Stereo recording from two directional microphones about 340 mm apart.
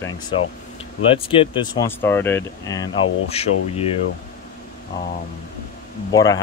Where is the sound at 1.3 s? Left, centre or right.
Centre.